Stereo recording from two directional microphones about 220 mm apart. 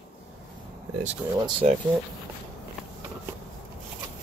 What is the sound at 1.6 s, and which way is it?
Speech, 35° right (ahead or behind).